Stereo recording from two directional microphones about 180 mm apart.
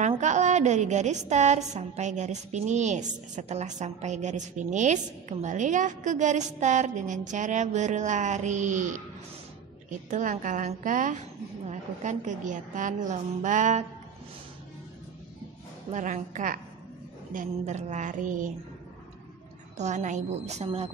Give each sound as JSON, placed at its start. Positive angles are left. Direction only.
{"t": 0.0, "sound": "a woman's voice", "side_deg": -40}
{"t": 15.9, "sound": "a woman's voice", "side_deg": -45}
{"t": 19.8, "sound": "a woman's voice", "side_deg": -40}